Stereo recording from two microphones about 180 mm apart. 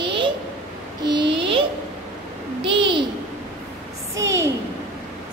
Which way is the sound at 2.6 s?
30° right (ahead or behind).